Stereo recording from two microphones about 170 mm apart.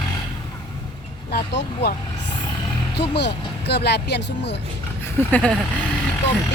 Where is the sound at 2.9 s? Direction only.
80° left.